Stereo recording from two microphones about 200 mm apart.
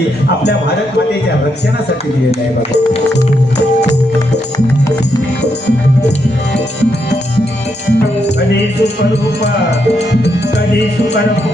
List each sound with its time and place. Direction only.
8.8 s music: 60° left (ahead or behind)